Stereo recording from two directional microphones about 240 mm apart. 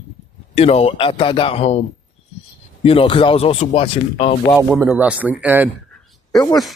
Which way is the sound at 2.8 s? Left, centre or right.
Left.